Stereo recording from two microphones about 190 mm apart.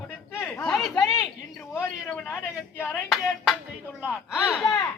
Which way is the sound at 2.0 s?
10° left (ahead or behind).